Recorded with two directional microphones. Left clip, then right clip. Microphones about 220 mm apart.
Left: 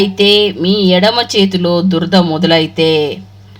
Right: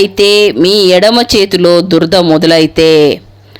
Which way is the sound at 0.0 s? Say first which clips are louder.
Right 3 dB; 40° right (ahead or behind).